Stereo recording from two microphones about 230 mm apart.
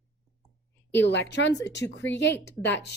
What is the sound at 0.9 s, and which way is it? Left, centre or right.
A woman's voice, left.